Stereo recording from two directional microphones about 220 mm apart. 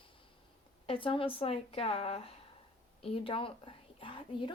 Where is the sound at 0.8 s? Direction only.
25° left (ahead or behind).